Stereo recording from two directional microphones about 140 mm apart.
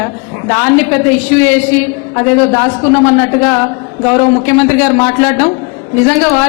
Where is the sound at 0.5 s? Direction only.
15° left (ahead or behind).